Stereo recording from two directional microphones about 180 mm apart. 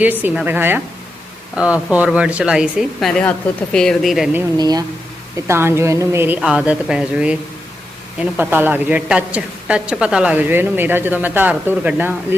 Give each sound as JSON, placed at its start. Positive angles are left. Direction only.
{"t": 0.0, "sound": "a woman's voice", "side_deg": -10}
{"t": 4.5, "sound": "a woman's voice", "side_deg": -20}